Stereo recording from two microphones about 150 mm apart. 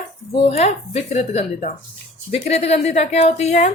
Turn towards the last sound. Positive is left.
turn(degrees=45)  # may be behind; listen again after turning